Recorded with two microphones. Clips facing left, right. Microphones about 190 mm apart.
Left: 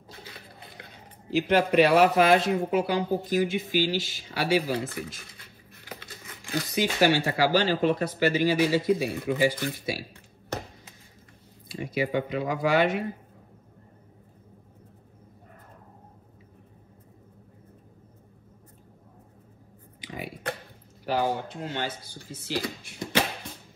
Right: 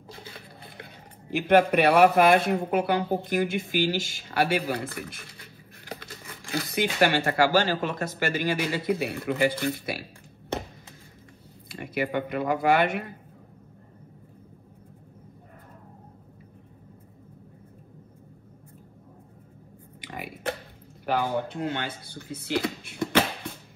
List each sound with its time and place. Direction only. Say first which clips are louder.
1.3 s speech: right 2 dB; 55° right (ahead or behind)
6.7 s speech: left 1 dB; 55° right (ahead or behind)
11.7 s speech: left 1 dB; 55° right (ahead or behind)
20.0 s burping: left 1 dB; 55° right (ahead or behind)
21.0 s speech: even; 55° right (ahead or behind)